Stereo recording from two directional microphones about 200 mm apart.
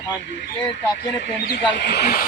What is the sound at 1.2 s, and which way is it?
Speech, 55° left (ahead or behind).